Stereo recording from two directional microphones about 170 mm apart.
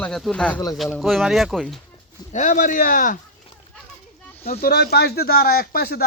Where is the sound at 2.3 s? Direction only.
50° left (ahead or behind).